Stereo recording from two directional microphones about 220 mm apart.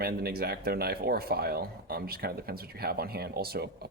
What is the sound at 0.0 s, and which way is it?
Speech, 45° right (ahead or behind).